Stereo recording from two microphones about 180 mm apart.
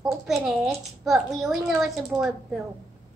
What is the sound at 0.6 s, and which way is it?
Speech, centre (ahead or behind).